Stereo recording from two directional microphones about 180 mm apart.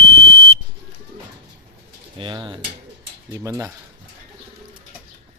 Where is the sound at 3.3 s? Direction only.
15° right (ahead or behind).